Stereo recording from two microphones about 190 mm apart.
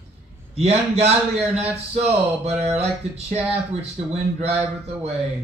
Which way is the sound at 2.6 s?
35° right (ahead or behind).